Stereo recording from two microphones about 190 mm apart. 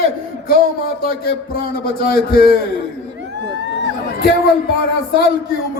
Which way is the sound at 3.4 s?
65° right (ahead or behind).